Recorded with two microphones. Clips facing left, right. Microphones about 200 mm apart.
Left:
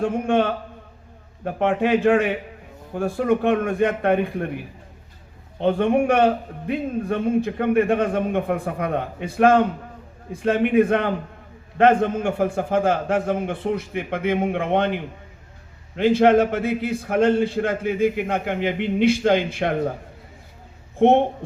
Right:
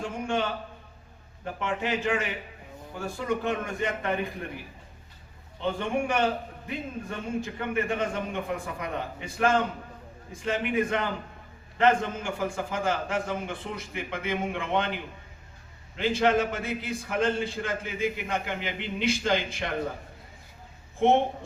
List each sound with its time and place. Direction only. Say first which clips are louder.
0.0 s a man's voice: left 9 dB; 60° left (ahead or behind)
5.5 s a man's voice: left 10 dB; 60° left (ahead or behind)
21.0 s a man's voice: left 6 dB; 60° left (ahead or behind)